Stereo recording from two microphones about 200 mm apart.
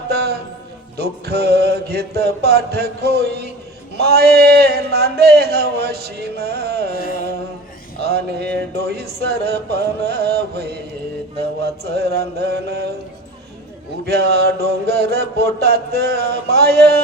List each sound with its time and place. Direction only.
0.1 s music: 55° right (ahead or behind)
0.9 s a man's voice: 55° right (ahead or behind)
8.0 s a man's voice: 55° right (ahead or behind)
14.0 s a man's voice: 55° right (ahead or behind)